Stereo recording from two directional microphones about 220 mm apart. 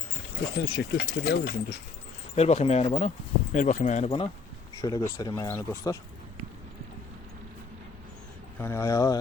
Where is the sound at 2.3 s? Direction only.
30° left (ahead or behind).